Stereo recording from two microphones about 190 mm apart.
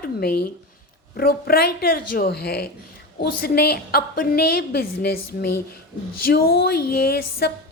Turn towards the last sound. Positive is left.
turn(degrees=55)  # may be behind; listen again after turning